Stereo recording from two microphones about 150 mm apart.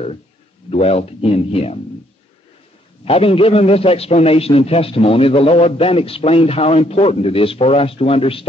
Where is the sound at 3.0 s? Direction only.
40° left (ahead or behind).